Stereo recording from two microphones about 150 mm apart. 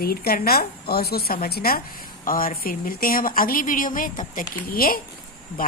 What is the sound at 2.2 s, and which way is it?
Speech, 70° left (ahead or behind).